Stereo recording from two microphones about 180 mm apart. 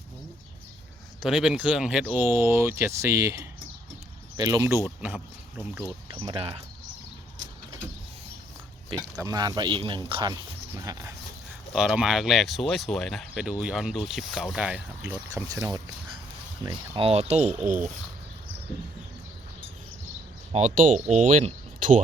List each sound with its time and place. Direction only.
1.2 s speech: centre (ahead or behind)
4.9 s speech: 5° right (ahead or behind)
6.2 s speech: 30° right (ahead or behind)
8.9 s speech: 20° right (ahead or behind)
11.7 s speech: 5° right (ahead or behind)
16.6 s speech: 30° right (ahead or behind)
20.5 s speech: 45° right (ahead or behind)